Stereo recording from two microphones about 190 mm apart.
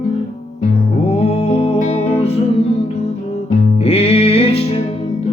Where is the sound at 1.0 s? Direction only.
35° left (ahead or behind).